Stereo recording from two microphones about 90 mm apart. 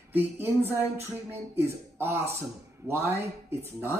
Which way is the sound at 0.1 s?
20° right (ahead or behind).